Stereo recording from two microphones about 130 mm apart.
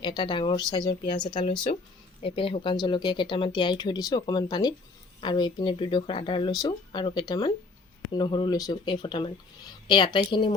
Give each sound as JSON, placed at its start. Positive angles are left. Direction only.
{"t": 0.0, "sound": "speech", "side_deg": 35}